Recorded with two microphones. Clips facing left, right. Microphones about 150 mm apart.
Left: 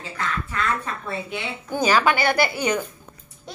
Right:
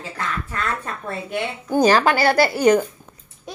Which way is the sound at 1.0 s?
45° right (ahead or behind).